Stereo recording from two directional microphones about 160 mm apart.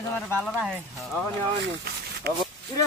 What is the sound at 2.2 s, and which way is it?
Speech, 80° right.